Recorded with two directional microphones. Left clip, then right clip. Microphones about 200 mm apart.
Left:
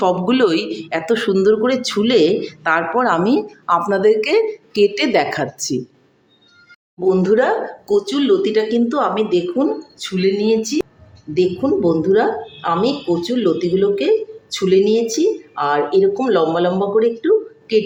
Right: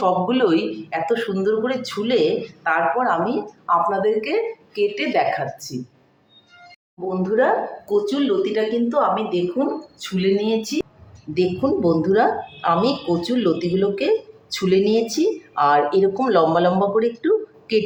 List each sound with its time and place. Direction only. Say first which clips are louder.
0.0 s speech: left 3 dB; 60° left (ahead or behind)
7.1 s speech: left 4 dB; 60° left (ahead or behind)
10.0 s speech: left 3 dB; 35° left (ahead or behind)
11.3 s a woman's voice: left 3 dB; 5° left (ahead or behind)